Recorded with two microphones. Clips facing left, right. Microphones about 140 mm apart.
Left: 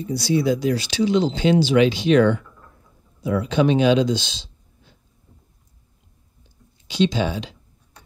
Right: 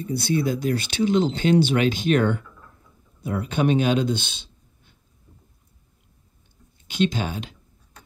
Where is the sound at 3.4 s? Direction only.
50° right (ahead or behind).